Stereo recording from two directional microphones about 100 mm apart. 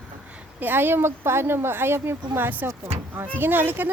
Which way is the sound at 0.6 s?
20° right (ahead or behind).